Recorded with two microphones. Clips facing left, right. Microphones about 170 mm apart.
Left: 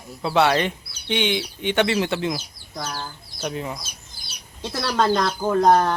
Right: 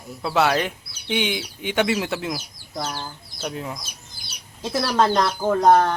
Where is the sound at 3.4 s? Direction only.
Centre (ahead or behind).